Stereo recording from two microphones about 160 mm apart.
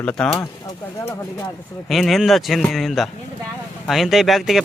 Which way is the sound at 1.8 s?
Centre (ahead or behind).